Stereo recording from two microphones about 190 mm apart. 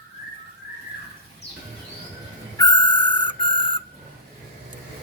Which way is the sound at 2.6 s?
25° left (ahead or behind).